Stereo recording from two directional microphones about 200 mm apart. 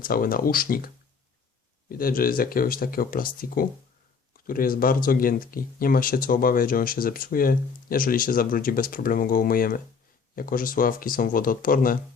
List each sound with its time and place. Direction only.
0.0 s speech: 45° left (ahead or behind)
1.9 s speech: 45° left (ahead or behind)